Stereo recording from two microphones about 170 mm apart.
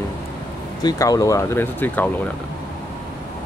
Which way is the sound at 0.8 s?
20° left (ahead or behind).